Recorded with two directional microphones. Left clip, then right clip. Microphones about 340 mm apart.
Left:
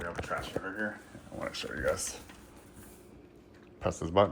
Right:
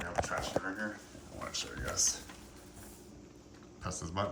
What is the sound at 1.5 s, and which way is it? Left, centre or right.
Speech, left.